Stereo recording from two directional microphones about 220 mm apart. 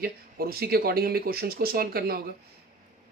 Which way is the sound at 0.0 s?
45° right (ahead or behind).